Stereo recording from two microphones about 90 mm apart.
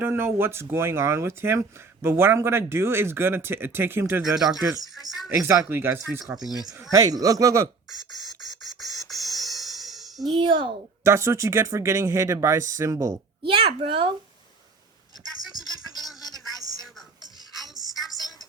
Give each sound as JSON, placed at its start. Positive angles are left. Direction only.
{"t": 0.0, "sound": "speech", "side_deg": -25}
{"t": 4.9, "sound": "speech", "side_deg": 0}
{"t": 5.4, "sound": "speech", "side_deg": -30}
{"t": 6.9, "sound": "speech", "side_deg": -40}
{"t": 7.9, "sound": "beatboxing", "side_deg": 0}
{"t": 10.2, "sound": "a child's voice", "side_deg": -70}
{"t": 11.0, "sound": "speech", "side_deg": -30}
{"t": 13.4, "sound": "a child's voice", "side_deg": -75}
{"t": 17.5, "sound": "music", "side_deg": 0}